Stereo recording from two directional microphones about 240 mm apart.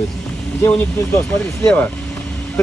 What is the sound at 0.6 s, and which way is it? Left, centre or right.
Speech, centre.